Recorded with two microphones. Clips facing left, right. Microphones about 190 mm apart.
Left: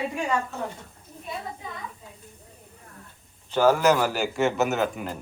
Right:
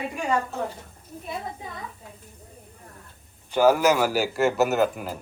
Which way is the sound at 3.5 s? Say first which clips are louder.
Right 1 dB; 10° right (ahead or behind).